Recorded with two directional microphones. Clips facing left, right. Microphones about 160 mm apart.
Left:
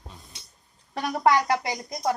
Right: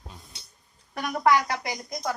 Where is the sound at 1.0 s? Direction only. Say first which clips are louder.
Left 1 dB; 30° left (ahead or behind).